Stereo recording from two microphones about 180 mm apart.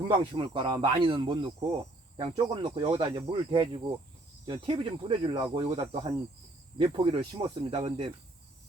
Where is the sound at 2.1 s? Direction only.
30° right (ahead or behind).